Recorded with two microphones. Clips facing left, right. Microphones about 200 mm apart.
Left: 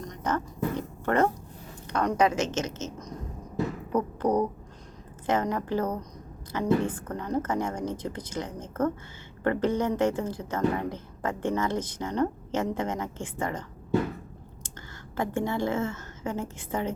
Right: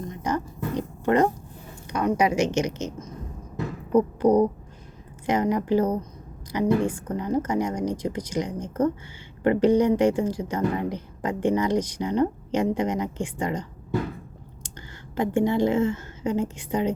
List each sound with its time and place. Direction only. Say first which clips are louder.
0.0 s roaring cats: right 2 dB; 10° right (ahead or behind)
1.9 s speech: right 2 dB; 10° right (ahead or behind)
5.2 s speech: right 4 dB; 15° right (ahead or behind)
15.1 s speech: right 6 dB; 15° right (ahead or behind)